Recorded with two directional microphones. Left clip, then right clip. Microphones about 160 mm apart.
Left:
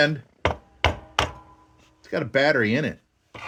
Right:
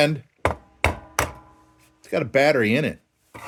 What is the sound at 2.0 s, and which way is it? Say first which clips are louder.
Speech: right 2 dB; 15° right (ahead or behind).